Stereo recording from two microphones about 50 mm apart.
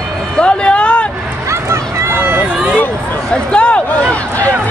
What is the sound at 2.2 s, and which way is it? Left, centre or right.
Run, right.